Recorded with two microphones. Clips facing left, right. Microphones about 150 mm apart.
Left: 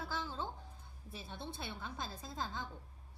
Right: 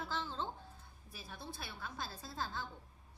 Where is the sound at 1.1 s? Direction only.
25° left (ahead or behind).